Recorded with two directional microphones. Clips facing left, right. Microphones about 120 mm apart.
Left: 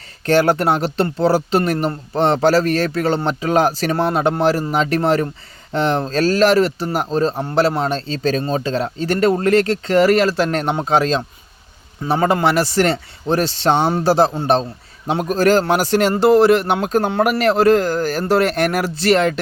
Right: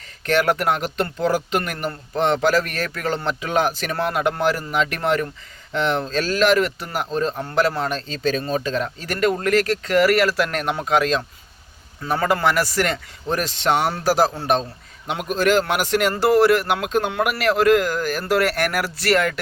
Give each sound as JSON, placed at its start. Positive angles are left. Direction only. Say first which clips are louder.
{"t": 0.3, "sound": "a man's voice", "louder": "left 4 dB", "side_deg": 30}